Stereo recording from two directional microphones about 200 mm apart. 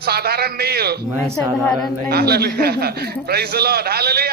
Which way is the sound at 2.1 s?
50° right (ahead or behind).